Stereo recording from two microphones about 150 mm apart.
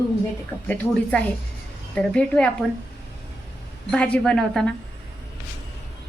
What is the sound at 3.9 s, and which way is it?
Speech, 5° left (ahead or behind).